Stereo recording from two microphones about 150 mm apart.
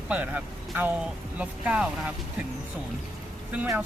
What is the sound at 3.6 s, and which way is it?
Speech, 15° right (ahead or behind).